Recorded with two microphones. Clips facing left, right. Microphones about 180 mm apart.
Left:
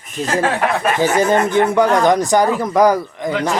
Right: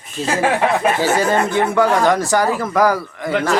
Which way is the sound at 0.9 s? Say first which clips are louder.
Left 2 dB; 20° left (ahead or behind).